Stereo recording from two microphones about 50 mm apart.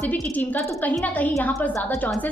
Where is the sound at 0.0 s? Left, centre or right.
Left.